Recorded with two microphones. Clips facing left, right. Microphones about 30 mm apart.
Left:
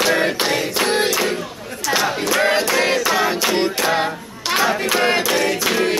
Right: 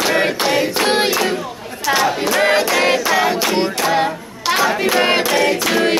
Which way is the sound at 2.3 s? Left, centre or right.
Centre.